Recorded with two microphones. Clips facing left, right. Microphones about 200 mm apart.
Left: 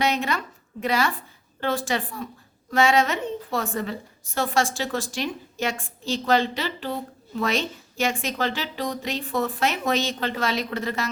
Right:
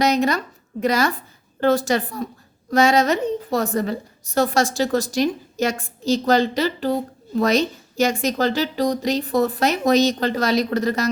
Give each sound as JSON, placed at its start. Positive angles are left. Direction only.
{"t": 0.0, "sound": "a woman's voice", "side_deg": -40}